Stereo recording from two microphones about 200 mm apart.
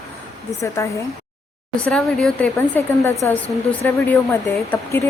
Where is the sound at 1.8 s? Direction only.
5° left (ahead or behind).